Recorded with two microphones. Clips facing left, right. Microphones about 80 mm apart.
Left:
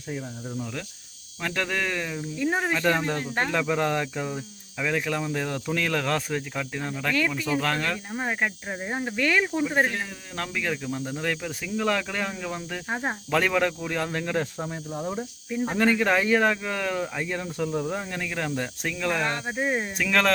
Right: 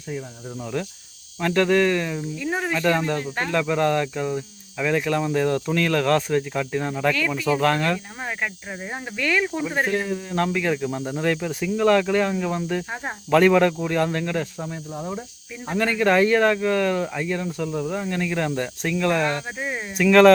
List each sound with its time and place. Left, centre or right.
0.5 s speech: centre
2.4 s speech: centre
7.3 s speech: centre
7.6 s speech: centre
8.2 s speech: centre
9.1 s speech: left
9.6 s speech: centre
19.5 s speech: centre
20.0 s speech: centre